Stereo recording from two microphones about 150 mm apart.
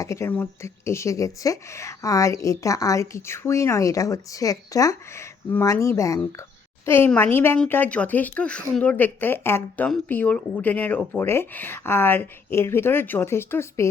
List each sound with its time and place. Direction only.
0.0 s a woman's voice: 20° left (ahead or behind)